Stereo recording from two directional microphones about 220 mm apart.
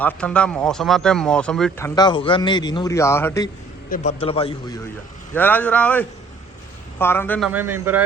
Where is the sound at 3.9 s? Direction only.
30° left (ahead or behind).